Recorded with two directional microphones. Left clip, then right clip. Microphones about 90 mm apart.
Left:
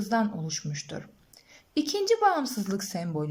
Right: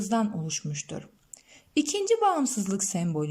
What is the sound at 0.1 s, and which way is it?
A woman's voice, 25° right (ahead or behind).